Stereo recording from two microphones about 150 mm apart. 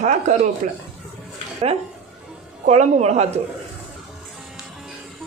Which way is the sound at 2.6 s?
50° right (ahead or behind).